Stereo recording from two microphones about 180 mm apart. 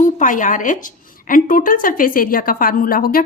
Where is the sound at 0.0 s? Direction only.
45° left (ahead or behind).